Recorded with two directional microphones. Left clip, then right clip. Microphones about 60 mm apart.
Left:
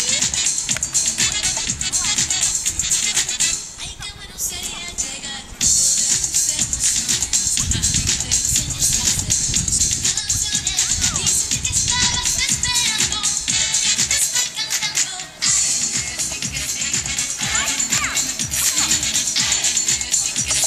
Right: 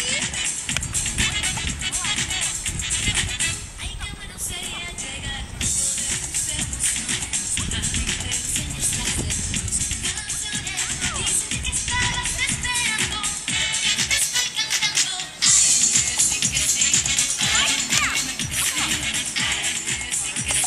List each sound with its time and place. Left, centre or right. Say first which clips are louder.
0.0 s music: left 4 dB; left
6.0 s music: left 7 dB; centre
15.4 s music: right 1 dB; centre
18.1 s music: left 2 dB; left